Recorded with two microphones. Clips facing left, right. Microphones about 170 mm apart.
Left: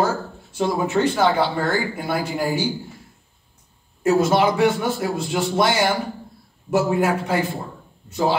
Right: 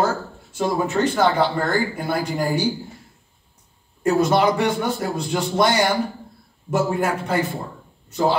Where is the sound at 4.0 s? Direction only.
5° left (ahead or behind).